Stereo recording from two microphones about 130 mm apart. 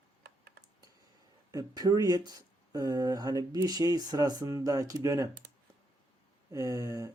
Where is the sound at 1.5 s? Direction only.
30° right (ahead or behind).